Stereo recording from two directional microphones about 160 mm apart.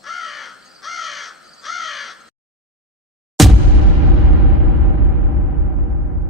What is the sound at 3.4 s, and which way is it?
Music, centre (ahead or behind).